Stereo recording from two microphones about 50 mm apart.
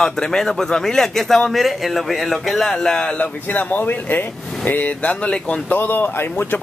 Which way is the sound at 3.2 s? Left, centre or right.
Left.